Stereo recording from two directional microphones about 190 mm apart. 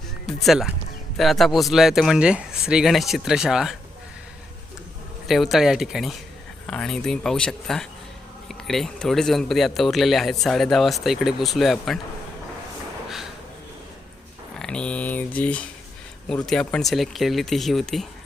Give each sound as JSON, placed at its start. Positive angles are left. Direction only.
{"t": 0.3, "sound": "speech", "side_deg": 0}
{"t": 5.3, "sound": "speech", "side_deg": 0}
{"t": 14.6, "sound": "speech", "side_deg": 5}